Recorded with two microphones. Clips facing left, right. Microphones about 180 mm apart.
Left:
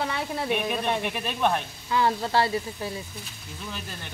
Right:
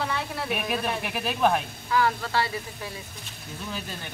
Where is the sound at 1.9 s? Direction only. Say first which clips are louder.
Left 1 dB; 30° left (ahead or behind).